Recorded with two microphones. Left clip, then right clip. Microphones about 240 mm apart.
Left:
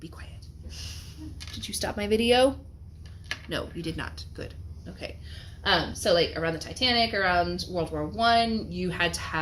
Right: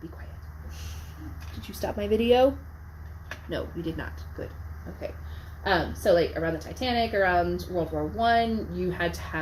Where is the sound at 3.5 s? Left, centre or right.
Left.